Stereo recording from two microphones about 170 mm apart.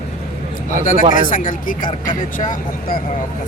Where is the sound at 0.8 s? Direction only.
55° left (ahead or behind).